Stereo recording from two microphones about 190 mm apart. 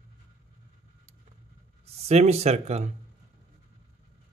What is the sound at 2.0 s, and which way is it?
Speech, 35° right (ahead or behind).